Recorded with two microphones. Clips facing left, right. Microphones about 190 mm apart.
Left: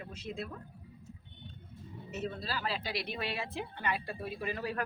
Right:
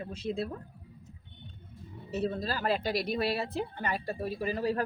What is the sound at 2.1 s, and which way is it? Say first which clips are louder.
A woman's voice: right 6 dB; 35° right (ahead or behind).